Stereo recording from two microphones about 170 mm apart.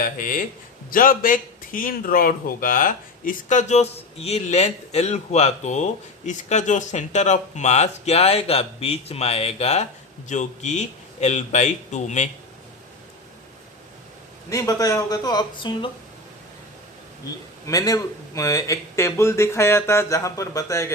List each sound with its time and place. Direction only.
0.0 s a man's voice: 55° left (ahead or behind)
14.5 s speech: 20° left (ahead or behind)
17.7 s speech: 20° left (ahead or behind)